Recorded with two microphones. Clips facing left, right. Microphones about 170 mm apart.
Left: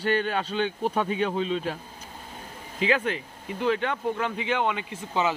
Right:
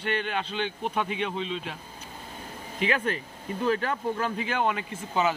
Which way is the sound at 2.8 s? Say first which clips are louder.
Left 2 dB; 20° left (ahead or behind).